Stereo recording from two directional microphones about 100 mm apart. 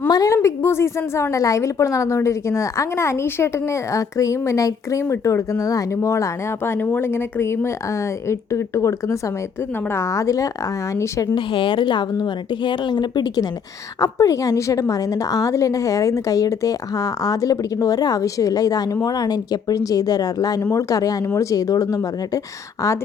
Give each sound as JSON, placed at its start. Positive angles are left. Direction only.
{"t": 0.1, "sound": "a sound", "side_deg": 40}
{"t": 0.4, "sound": "a woman's voice", "side_deg": 25}
{"t": 11.3, "sound": "speech", "side_deg": 55}
{"t": 14.0, "sound": "a woman's voice", "side_deg": 35}